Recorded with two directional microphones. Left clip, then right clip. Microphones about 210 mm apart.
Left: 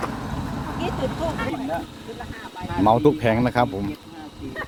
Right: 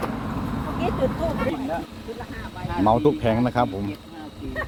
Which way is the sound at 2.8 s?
30° left (ahead or behind).